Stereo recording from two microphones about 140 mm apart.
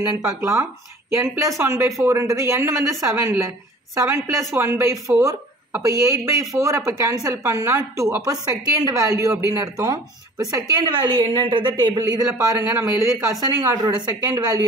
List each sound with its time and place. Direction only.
0.0 s speech: 20° right (ahead or behind)